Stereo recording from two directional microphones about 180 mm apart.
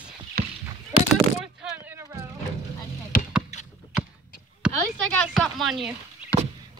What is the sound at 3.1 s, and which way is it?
Rowboat, 50° left (ahead or behind).